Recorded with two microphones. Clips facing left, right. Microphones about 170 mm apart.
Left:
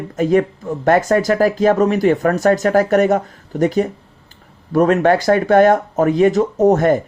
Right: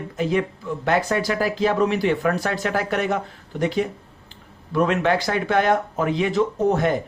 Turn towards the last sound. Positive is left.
turn(degrees=45)  # may be behind; listen again after turning